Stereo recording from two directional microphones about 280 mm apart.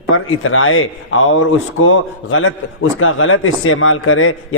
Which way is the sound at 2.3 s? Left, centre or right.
Left.